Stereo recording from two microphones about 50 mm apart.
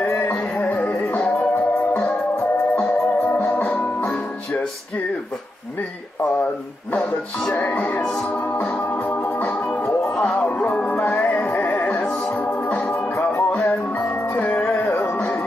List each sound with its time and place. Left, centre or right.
0.0 s music: left
0.6 s music: left
6.4 s a sound: left
7.5 s music: left
14.9 s music: left
15.1 s music: left